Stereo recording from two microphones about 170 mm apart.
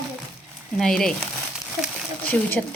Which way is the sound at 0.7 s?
Centre (ahead or behind).